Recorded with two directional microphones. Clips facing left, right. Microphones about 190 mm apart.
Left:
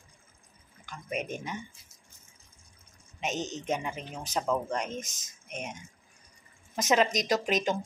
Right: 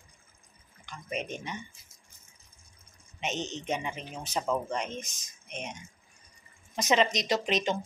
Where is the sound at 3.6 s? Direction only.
5° left (ahead or behind).